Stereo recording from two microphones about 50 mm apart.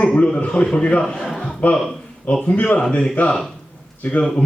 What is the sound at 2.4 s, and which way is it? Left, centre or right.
Speech, left.